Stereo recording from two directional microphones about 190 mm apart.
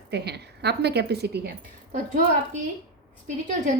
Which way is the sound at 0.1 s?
60° right (ahead or behind).